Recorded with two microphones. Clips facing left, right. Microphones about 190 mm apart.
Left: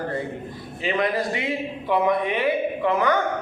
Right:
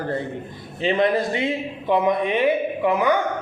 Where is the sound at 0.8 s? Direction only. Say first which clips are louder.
Right 4 dB; 25° right (ahead or behind).